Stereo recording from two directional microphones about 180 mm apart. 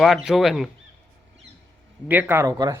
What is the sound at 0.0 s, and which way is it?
Speech, centre (ahead or behind).